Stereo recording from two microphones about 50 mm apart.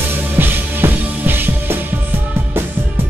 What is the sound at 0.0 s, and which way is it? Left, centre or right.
Music, right.